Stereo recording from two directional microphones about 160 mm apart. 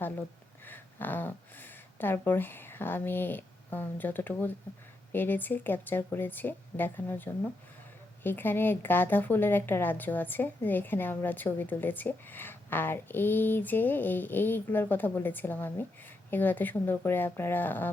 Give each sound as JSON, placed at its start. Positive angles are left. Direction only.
{"t": 0.6, "sound": "speech", "side_deg": 10}